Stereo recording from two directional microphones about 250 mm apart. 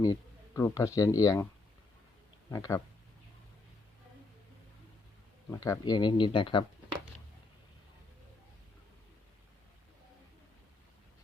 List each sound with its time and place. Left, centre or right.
0.0 s a sound: centre
0.9 s speech: centre
2.5 s speech: centre
5.5 s speech: centre